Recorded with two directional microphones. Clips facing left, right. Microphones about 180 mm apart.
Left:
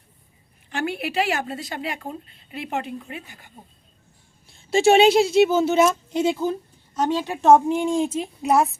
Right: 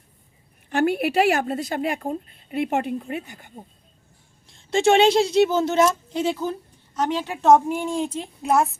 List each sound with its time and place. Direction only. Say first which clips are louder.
0.7 s speech: right 6 dB; 50° right (ahead or behind)
4.4 s speech: left 2 dB; 10° left (ahead or behind)